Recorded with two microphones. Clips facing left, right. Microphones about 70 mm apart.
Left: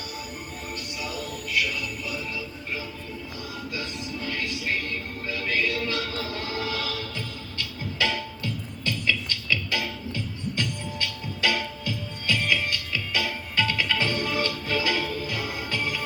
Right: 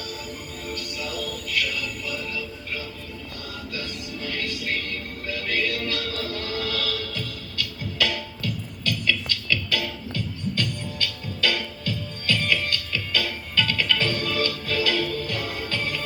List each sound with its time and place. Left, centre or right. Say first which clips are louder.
0.7 s music: right 3 dB; left